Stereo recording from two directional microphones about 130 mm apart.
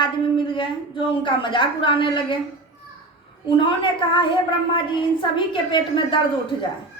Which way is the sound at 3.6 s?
40° left (ahead or behind).